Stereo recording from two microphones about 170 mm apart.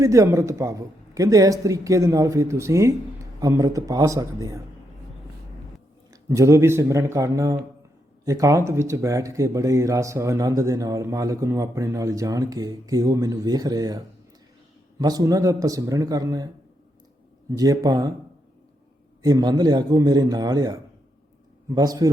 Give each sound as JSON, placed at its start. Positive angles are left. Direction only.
{"t": 0.0, "sound": "speech", "side_deg": -20}
{"t": 6.2, "sound": "speech", "side_deg": -15}
{"t": 17.6, "sound": "speech", "side_deg": -20}
{"t": 19.2, "sound": "speech", "side_deg": -20}
{"t": 21.8, "sound": "speech", "side_deg": -20}